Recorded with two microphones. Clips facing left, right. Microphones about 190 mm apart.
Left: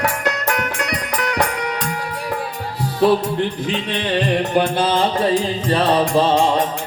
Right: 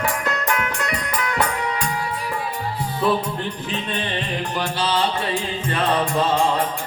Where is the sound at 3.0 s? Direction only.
80° left.